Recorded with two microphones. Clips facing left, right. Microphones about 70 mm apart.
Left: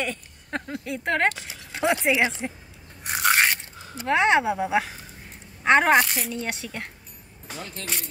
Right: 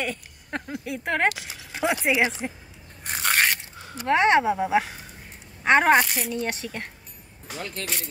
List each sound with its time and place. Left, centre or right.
0.0 s speech: centre
3.0 s scrape: centre
4.1 s a woman's voice: centre
7.8 s speech: right